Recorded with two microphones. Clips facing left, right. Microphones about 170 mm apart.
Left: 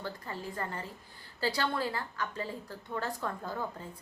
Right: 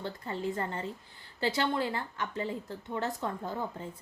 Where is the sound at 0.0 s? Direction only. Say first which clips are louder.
Right 5 dB; 25° right (ahead or behind).